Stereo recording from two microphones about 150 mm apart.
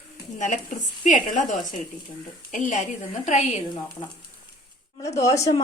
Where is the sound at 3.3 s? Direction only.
45° left (ahead or behind).